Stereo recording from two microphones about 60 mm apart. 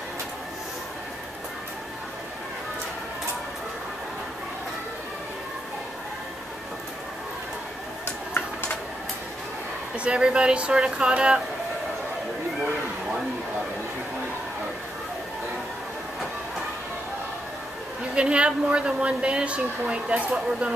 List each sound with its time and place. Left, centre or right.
9.9 s a woman's voice: centre
18.1 s a woman's voice: centre